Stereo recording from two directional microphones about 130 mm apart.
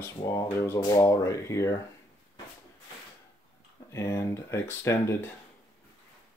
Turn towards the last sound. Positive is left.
turn(degrees=20)  # may be behind; listen again after turning